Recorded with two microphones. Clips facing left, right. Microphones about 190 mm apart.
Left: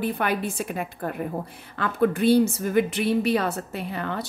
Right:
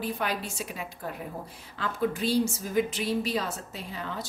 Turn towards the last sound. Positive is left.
turn(degrees=60)  # may be behind; listen again after turning